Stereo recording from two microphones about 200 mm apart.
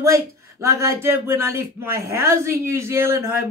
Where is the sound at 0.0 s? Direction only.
15° right (ahead or behind).